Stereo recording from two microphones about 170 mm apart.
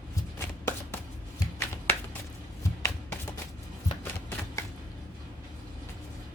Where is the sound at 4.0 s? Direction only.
15° left (ahead or behind).